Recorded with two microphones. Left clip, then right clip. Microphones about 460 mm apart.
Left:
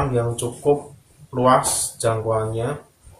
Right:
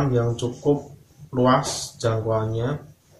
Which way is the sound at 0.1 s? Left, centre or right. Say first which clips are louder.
Left 1 dB; left.